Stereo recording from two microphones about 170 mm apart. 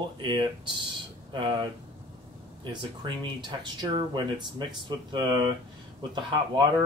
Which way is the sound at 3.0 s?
25° right (ahead or behind).